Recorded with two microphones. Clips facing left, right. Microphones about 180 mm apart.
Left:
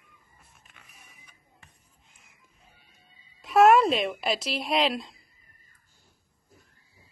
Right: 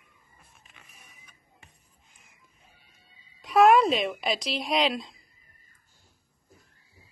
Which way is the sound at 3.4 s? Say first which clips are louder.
Left 1 dB; centre (ahead or behind).